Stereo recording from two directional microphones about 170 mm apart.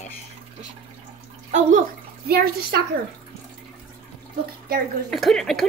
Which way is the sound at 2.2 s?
65° right (ahead or behind).